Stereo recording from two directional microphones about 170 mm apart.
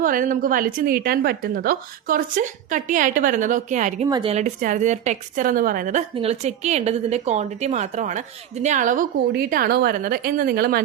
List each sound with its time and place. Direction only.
0.0 s a woman's voice: 55° right (ahead or behind)
4.0 s a woman's voice: 30° right (ahead or behind); by 6.0 s 50° right (ahead or behind)
6.1 s a woman's voice: 40° right (ahead or behind)
9.5 s a woman's voice: 60° right (ahead or behind)